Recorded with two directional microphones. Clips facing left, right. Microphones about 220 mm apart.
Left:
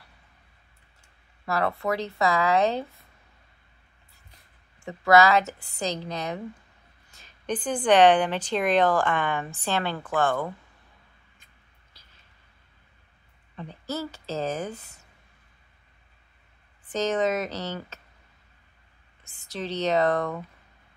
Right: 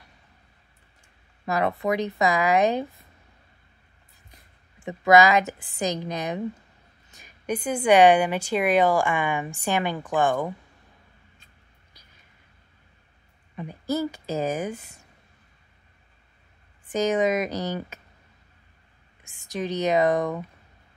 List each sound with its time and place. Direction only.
1.4 s a woman's voice: 15° right (ahead or behind)
4.7 s a woman's voice: 20° right (ahead or behind)
11.9 s a sound: 15° right (ahead or behind)
13.6 s a woman's voice: 15° right (ahead or behind)
16.9 s a woman's voice: 10° right (ahead or behind)
19.2 s a woman's voice: 15° right (ahead or behind)